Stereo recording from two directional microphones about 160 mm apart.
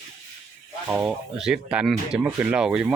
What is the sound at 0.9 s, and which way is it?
Speech, 15° right (ahead or behind).